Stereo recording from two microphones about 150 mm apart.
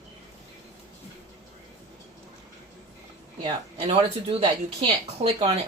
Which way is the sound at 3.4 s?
35° right (ahead or behind).